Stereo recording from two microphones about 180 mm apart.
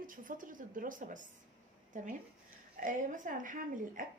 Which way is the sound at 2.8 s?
45° right (ahead or behind).